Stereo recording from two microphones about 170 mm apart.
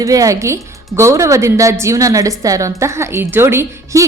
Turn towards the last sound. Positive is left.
turn(degrees=-15)  # may be behind; listen again after turning